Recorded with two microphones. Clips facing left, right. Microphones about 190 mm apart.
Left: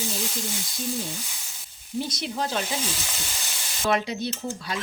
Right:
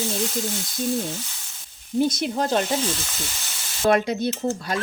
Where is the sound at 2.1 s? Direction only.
50° right (ahead or behind).